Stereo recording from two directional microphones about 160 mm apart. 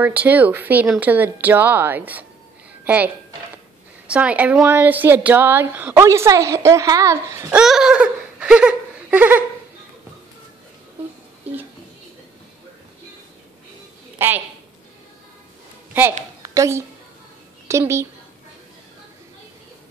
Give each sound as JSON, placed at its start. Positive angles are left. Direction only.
{"t": 0.0, "sound": "a woman's voice", "side_deg": -10}
{"t": 4.1, "sound": "a woman's voice", "side_deg": -10}
{"t": 7.6, "sound": "a sound", "side_deg": -5}
{"t": 14.1, "sound": "a woman's voice", "side_deg": -15}
{"t": 16.0, "sound": "a woman's voice", "side_deg": -10}